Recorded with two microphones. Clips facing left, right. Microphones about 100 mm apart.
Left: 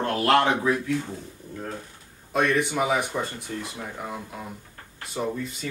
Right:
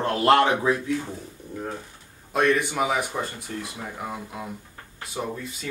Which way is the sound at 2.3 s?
Centre (ahead or behind).